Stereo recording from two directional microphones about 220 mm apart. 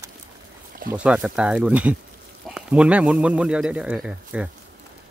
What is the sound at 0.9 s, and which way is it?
Speech, 5° right (ahead or behind).